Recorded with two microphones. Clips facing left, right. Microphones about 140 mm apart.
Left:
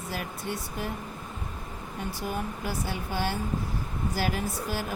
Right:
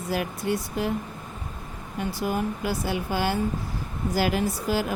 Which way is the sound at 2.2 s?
90° right.